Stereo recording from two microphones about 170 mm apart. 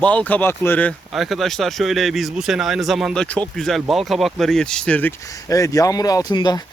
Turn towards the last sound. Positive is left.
turn(degrees=25)  # may be behind; listen again after turning